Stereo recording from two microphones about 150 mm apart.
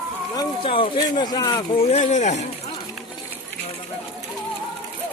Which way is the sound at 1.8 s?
50° left (ahead or behind).